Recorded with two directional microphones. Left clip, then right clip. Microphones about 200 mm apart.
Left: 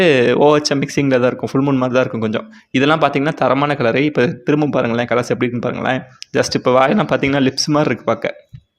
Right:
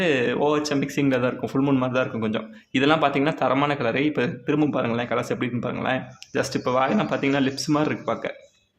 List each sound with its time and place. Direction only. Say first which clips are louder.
0.0 s speech: left 10 dB; 35° left (ahead or behind)